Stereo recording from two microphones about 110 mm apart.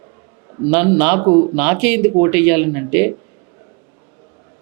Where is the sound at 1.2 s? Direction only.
35° right (ahead or behind).